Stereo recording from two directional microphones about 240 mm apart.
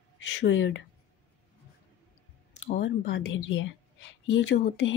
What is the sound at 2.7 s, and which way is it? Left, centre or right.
Speech, left.